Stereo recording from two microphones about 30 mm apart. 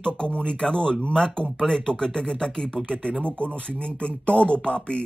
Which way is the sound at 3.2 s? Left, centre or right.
Left.